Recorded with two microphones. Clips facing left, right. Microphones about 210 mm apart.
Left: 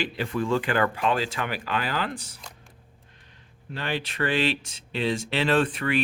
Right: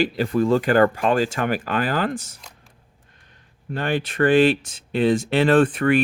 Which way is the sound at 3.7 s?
50° right (ahead or behind).